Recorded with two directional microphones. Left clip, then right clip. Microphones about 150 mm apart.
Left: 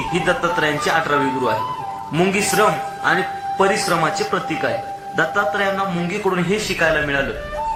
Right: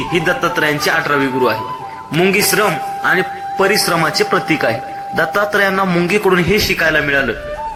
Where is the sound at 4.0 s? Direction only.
35° right (ahead or behind).